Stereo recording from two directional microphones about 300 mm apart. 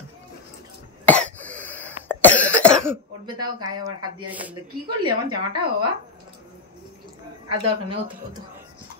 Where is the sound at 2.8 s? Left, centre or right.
Centre.